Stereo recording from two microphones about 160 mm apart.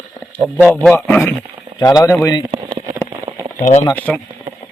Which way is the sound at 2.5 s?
35° right (ahead or behind).